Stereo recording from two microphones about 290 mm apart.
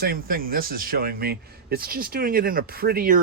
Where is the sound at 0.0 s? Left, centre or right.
Right.